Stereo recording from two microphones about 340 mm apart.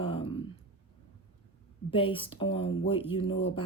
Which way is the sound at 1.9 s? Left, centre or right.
Centre.